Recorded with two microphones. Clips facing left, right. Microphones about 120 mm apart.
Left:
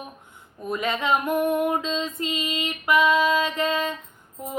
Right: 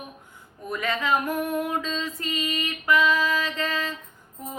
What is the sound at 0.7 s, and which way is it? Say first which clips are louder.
Female singing: left 1 dB; 20° left (ahead or behind).